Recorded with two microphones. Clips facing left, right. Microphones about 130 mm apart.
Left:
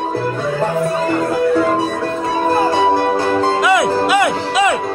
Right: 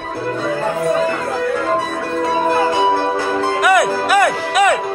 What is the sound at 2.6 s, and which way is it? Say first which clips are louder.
Music: left 1 dB; 20° left (ahead or behind).